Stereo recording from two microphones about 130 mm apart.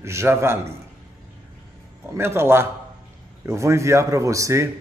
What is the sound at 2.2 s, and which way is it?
A man's voice, 20° right (ahead or behind).